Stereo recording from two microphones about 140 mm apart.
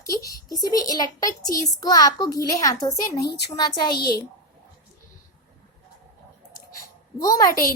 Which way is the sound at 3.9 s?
90° left.